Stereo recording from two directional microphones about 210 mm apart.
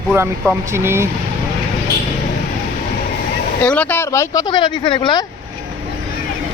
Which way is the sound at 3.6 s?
5° left (ahead or behind).